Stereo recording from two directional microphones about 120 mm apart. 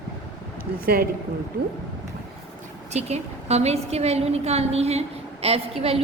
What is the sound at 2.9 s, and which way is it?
A woman's voice, 65° right (ahead or behind).